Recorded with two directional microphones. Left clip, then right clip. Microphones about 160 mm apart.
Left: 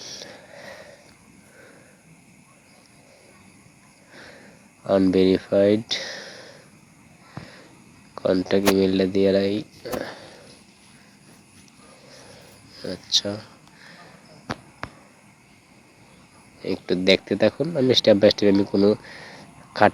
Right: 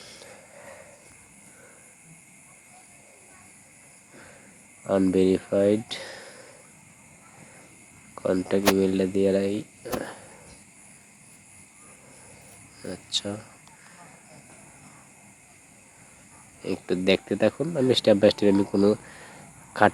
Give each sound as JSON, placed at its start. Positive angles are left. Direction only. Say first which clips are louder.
{"t": 0.0, "sound": "snort", "louder": "left 8 dB", "side_deg": 10}
{"t": 4.8, "sound": "speech", "louder": "left 3 dB", "side_deg": 10}
{"t": 8.1, "sound": "speech", "louder": "left 4 dB", "side_deg": 15}
{"t": 9.8, "sound": "a sound", "louder": "left 2 dB", "side_deg": 5}
{"t": 12.8, "sound": "a sound", "louder": "left 7 dB", "side_deg": 10}
{"t": 16.6, "sound": "speech", "louder": "left 4 dB", "side_deg": 5}